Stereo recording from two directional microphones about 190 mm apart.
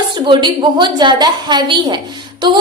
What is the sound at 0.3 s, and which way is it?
A woman's voice, 25° right (ahead or behind).